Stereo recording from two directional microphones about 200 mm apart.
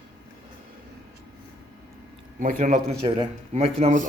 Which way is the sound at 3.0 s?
30° right (ahead or behind).